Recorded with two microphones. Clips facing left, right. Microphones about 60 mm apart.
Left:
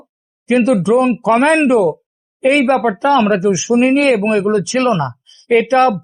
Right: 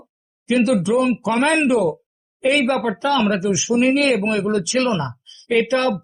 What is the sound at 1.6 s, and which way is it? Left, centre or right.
Speech, centre.